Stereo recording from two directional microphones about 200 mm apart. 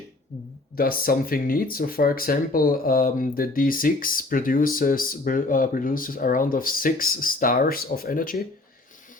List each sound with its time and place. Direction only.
0.8 s speech: 45° left (ahead or behind)